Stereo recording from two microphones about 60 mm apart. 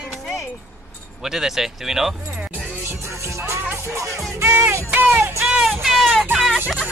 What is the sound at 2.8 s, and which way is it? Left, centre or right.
Music, right.